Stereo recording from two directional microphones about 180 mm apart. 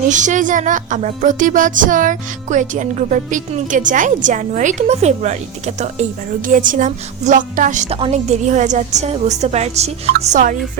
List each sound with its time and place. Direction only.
0.1 s music: 45° right (ahead or behind)
7.9 s a woman's voice: 35° right (ahead or behind)
10.3 s music: 45° right (ahead or behind)